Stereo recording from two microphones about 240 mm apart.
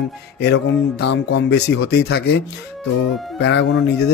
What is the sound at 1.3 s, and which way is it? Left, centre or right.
Speech, left.